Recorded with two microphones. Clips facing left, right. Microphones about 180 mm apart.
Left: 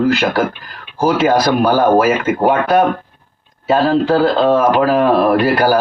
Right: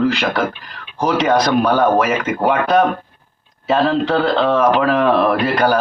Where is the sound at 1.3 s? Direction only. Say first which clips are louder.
Left 2 dB; 30° left (ahead or behind).